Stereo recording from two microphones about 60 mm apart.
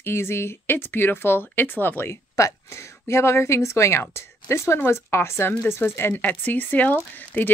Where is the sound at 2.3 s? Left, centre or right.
Left.